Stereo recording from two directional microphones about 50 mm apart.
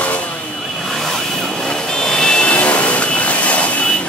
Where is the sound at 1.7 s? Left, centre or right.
Centre.